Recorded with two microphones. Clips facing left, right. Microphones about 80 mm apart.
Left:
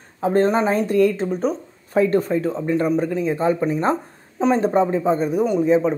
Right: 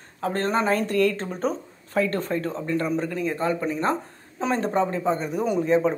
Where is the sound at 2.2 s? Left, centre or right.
Centre.